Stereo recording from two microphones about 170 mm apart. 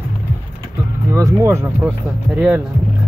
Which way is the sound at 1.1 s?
15° right (ahead or behind).